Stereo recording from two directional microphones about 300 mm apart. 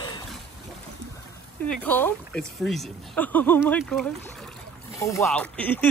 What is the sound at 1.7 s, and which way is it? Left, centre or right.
Speech, centre.